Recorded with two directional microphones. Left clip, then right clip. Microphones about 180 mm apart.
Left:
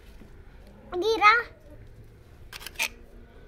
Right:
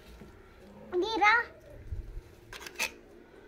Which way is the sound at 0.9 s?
70° left (ahead or behind).